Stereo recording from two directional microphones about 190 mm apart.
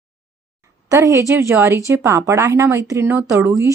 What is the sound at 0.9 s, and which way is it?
A woman's voice, 15° right (ahead or behind).